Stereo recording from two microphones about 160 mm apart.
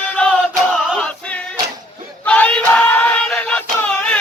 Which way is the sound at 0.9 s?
5° left (ahead or behind).